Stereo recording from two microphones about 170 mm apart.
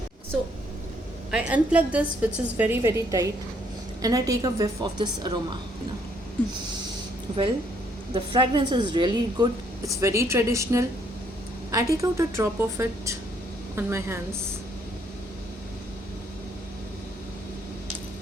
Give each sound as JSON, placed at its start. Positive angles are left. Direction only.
{"t": 1.3, "sound": "a woman's voice", "side_deg": -5}
{"t": 8.1, "sound": "a woman's voice", "side_deg": -30}